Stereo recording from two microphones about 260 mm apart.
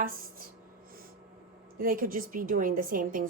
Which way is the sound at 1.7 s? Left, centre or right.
Right.